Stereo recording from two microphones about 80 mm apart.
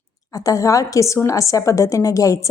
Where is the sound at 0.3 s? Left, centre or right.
Left.